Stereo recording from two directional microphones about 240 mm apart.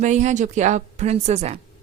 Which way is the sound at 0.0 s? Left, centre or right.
Right.